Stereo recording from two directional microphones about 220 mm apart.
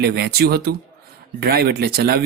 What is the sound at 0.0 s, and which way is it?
Speech, 45° right (ahead or behind).